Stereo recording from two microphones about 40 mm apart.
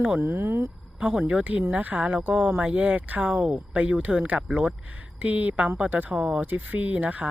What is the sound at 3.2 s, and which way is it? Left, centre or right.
Speech, right.